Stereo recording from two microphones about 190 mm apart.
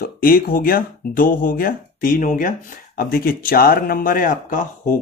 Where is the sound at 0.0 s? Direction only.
50° left (ahead or behind).